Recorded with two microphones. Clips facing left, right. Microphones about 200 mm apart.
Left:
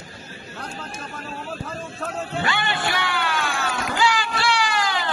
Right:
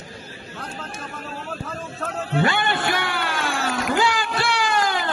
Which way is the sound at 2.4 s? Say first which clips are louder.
Right 4 dB; 50° right (ahead or behind).